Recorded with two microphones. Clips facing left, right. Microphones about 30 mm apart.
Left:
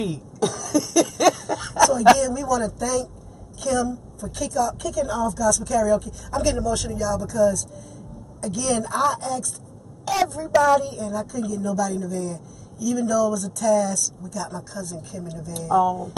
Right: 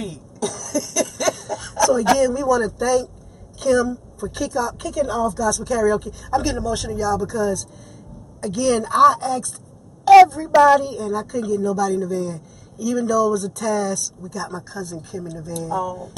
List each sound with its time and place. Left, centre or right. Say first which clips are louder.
0.0 s cough: left 3 dB; centre
1.5 s a sound: left 2 dB; centre
2.1 s a woman's voice: right 5 dB; right
15.7 s speech: left 6 dB; centre